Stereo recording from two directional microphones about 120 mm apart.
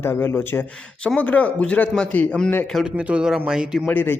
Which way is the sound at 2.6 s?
Centre (ahead or behind).